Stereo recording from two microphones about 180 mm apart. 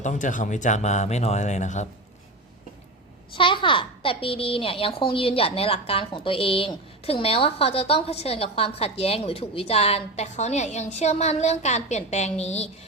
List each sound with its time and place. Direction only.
0.0 s a child's voice: 45° left (ahead or behind)
3.3 s a child's voice: 30° left (ahead or behind)